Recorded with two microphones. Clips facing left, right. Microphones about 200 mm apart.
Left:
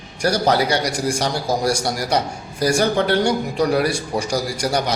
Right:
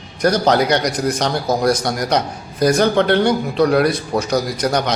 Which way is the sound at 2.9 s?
65° right (ahead or behind).